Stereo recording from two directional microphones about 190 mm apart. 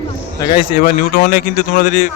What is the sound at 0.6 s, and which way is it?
Speech, 50° left (ahead or behind).